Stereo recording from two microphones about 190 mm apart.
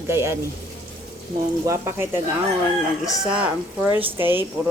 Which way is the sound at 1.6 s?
15° right (ahead or behind).